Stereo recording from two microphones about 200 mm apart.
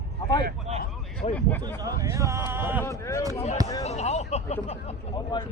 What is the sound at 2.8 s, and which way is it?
Speech, 15° left (ahead or behind).